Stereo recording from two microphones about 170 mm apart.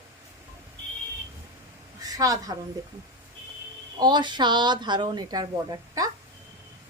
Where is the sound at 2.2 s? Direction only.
20° right (ahead or behind).